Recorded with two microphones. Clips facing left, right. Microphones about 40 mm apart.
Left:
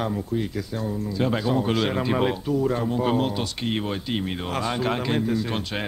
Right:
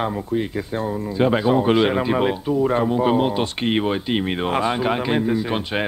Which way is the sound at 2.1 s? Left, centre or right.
Centre.